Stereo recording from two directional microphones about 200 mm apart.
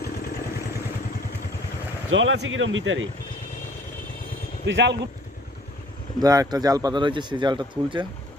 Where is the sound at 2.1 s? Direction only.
70° right (ahead or behind).